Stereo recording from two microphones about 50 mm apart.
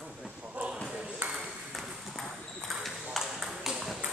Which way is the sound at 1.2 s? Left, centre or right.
Right.